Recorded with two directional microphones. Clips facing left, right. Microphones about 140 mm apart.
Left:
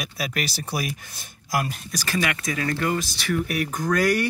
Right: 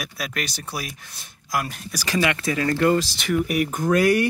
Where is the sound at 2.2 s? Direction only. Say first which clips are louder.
Right 5 dB; 30° right (ahead or behind).